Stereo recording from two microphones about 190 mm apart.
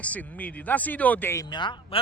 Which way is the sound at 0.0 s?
10° left (ahead or behind).